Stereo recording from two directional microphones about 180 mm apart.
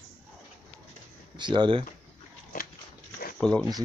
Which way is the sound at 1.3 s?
25° right (ahead or behind).